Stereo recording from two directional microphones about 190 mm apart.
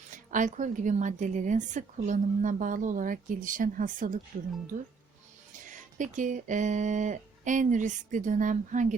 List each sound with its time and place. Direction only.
0.1 s a woman's voice: 40° right (ahead or behind)
5.6 s speech: 40° right (ahead or behind)